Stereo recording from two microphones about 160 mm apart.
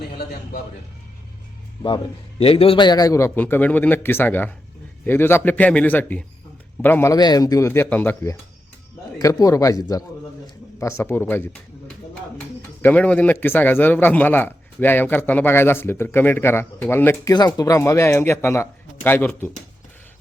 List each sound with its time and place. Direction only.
0.1 s a man's voice: 65° left (ahead or behind)
2.4 s a man's voice: 35° left (ahead or behind); by 11.5 s 15° left (ahead or behind)
12.8 s a man's voice: 10° left (ahead or behind)